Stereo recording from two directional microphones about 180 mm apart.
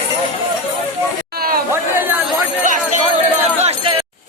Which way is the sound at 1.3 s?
55° right (ahead or behind).